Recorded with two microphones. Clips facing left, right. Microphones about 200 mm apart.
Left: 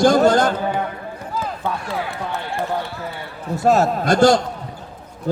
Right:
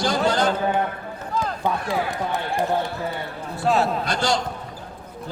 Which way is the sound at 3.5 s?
45° left (ahead or behind).